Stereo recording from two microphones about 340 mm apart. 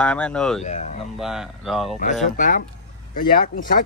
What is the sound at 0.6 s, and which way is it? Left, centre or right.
Speech, centre.